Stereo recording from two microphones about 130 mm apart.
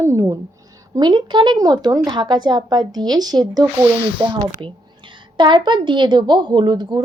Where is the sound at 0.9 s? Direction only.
35° right (ahead or behind).